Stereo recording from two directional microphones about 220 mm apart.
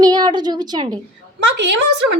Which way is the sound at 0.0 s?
20° right (ahead or behind).